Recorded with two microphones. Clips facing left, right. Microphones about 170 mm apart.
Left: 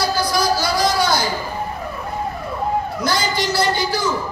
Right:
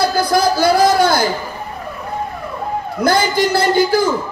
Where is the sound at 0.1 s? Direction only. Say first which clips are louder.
Right 4 dB; 55° right (ahead or behind).